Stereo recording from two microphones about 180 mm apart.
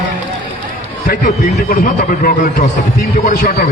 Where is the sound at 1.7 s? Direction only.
50° left (ahead or behind).